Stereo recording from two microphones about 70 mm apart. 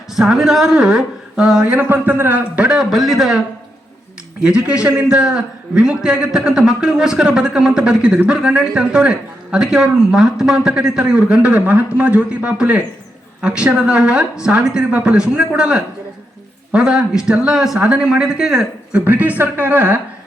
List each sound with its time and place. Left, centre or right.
0.2 s a man's voice: centre
1.7 s speech: right
2.4 s a man's voice: centre
2.7 s speech: centre
4.4 s a man's voice: centre
19.0 s speech: right